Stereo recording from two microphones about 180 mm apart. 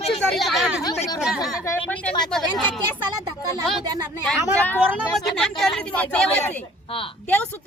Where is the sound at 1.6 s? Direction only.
10° left (ahead or behind).